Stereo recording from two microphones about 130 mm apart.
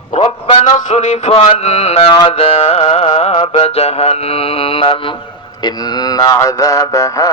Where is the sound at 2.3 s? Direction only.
50° left (ahead or behind).